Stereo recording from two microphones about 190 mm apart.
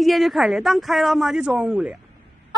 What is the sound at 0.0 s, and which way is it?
Speech, centre (ahead or behind).